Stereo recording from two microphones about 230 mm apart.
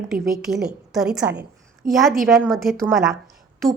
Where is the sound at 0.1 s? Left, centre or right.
Centre.